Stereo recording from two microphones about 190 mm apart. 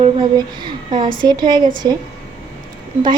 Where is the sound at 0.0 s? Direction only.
25° right (ahead or behind).